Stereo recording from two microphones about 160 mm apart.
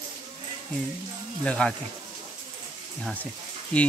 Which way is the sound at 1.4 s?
5° left (ahead or behind).